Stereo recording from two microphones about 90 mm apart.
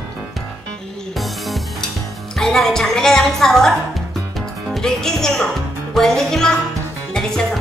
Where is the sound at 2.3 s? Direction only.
5° left (ahead or behind).